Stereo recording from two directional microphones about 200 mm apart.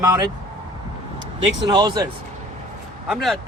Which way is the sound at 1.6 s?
20° right (ahead or behind).